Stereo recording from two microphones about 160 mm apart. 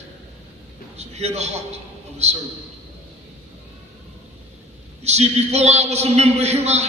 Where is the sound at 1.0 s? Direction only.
45° right (ahead or behind).